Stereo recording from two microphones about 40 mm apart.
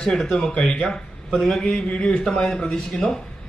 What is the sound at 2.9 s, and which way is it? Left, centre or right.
Speech, centre.